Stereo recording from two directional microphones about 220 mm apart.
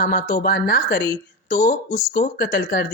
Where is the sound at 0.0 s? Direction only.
40° left (ahead or behind).